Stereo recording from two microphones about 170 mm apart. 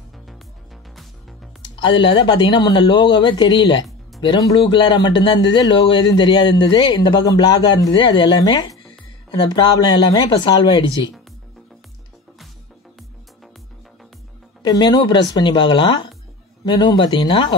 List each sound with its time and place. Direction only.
1.6 s a man's voice: 30° left (ahead or behind)
14.6 s a man's voice: 25° left (ahead or behind)